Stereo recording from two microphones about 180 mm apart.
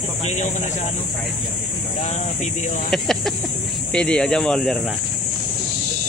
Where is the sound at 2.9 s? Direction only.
Centre (ahead or behind).